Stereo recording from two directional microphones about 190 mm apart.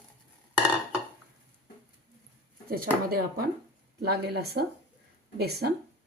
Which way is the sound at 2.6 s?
50° right (ahead or behind).